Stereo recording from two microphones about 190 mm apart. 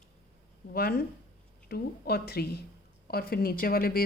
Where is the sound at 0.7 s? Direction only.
55° left (ahead or behind).